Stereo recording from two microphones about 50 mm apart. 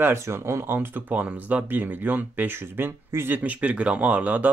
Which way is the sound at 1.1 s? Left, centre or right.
Right.